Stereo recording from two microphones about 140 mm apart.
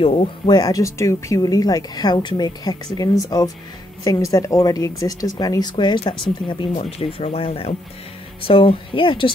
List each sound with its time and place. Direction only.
0.0 s speech: 40° left (ahead or behind)
0.6 s a woman's voice: 25° left (ahead or behind)
6.7 s speech: 45° left (ahead or behind)